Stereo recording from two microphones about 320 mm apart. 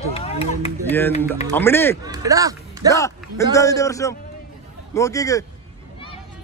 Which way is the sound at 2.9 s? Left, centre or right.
Centre.